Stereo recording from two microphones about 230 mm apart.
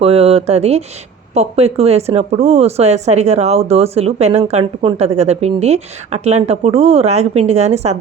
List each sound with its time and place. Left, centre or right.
0.0 s speech: right